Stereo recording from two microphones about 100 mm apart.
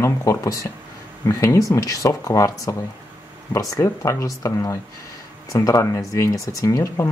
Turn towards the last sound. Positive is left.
turn(degrees=30)  # may be behind; listen again after turning